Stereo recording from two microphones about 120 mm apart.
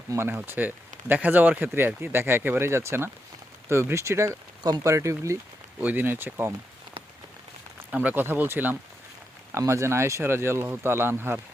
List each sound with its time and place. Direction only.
0.1 s speech: 20° right (ahead or behind)
5.8 s speech: 15° right (ahead or behind)
7.9 s speech: 10° right (ahead or behind)